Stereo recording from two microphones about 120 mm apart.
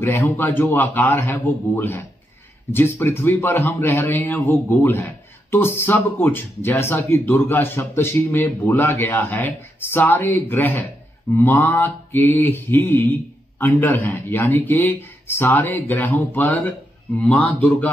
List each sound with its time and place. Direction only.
0.0 s a man's voice: 15° left (ahead or behind)